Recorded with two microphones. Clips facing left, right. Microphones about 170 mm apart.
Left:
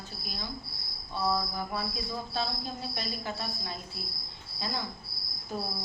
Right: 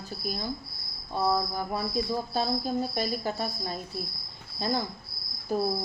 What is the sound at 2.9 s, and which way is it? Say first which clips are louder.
Speech: right 7 dB; 40° right (ahead or behind).